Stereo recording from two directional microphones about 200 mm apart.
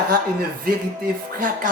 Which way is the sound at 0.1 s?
50° right (ahead or behind).